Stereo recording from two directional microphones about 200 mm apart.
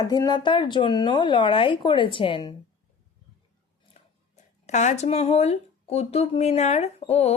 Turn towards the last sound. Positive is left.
turn(degrees=30)  # may be behind; listen again after turning